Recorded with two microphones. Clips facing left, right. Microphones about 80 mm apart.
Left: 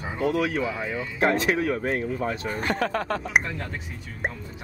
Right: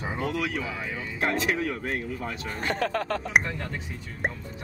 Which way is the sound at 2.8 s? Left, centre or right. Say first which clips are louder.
Left 1 dB; left.